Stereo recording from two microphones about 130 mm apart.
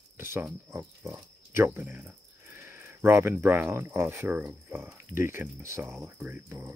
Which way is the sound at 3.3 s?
15° right (ahead or behind).